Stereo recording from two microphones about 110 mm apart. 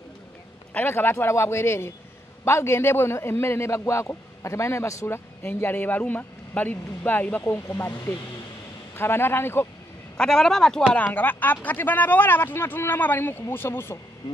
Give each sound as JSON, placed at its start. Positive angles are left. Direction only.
{"t": 0.7, "sound": "a man's voice", "side_deg": 20}
{"t": 10.1, "sound": "a man's voice", "side_deg": 5}
{"t": 10.9, "sound": "speech", "side_deg": 15}